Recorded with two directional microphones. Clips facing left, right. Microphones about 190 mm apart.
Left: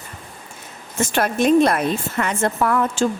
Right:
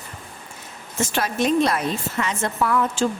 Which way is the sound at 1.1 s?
55° left (ahead or behind).